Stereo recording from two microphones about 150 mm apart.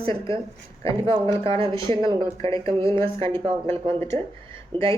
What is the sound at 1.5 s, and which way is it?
Speech, 35° right (ahead or behind).